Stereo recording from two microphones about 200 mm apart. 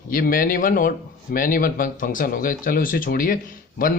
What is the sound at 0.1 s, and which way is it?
A man's voice, 45° left (ahead or behind).